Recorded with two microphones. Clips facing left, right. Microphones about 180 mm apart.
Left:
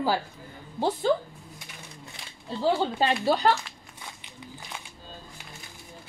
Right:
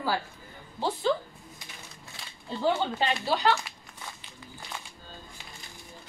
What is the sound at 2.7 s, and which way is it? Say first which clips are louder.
Speech: left 3 dB; 40° left (ahead or behind).